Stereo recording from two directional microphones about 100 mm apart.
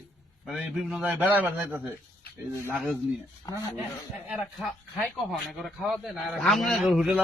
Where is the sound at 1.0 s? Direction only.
15° right (ahead or behind).